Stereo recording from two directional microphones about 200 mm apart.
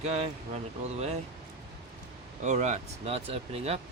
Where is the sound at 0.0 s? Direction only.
30° right (ahead or behind).